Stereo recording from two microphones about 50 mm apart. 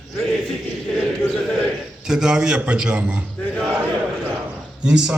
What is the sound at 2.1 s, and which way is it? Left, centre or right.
A man's voice, centre.